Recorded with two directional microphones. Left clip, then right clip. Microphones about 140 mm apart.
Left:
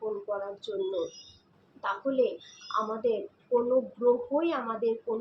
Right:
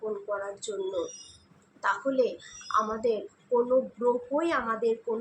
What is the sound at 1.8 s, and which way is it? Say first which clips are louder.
Speech: right 3 dB; centre (ahead or behind).